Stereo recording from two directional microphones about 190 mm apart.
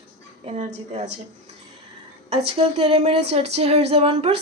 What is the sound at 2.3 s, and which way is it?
A woman's voice, 35° right (ahead or behind).